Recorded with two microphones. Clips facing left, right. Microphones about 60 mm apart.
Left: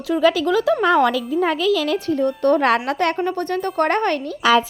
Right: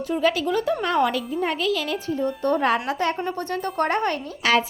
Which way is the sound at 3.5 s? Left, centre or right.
Left.